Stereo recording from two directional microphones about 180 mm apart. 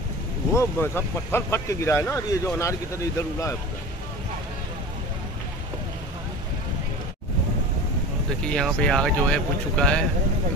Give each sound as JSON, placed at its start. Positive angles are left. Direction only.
{"t": 0.6, "sound": "speech", "side_deg": 15}
{"t": 8.5, "sound": "speech", "side_deg": 5}